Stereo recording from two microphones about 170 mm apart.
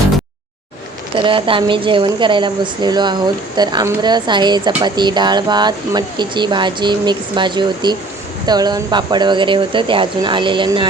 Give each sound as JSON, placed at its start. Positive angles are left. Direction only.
{"t": 1.1, "sound": "speech", "side_deg": -30}